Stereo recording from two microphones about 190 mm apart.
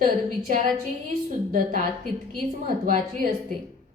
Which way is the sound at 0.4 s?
40° right (ahead or behind).